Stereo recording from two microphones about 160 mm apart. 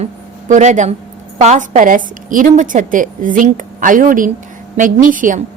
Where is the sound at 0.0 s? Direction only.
50° right (ahead or behind).